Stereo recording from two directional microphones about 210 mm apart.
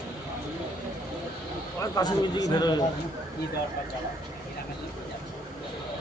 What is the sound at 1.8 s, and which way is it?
A man's voice, 20° left (ahead or behind).